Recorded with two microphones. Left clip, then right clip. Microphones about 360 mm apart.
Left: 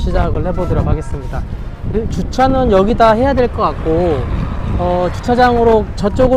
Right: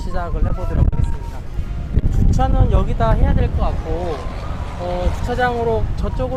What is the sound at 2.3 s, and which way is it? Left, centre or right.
Speech, left.